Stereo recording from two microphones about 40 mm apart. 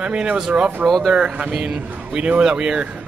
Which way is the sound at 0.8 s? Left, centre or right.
Centre.